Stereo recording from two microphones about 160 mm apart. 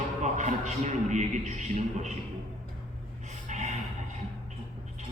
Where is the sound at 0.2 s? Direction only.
50° right (ahead or behind).